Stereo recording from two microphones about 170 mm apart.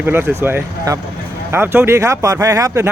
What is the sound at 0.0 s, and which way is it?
Speech, 10° right (ahead or behind).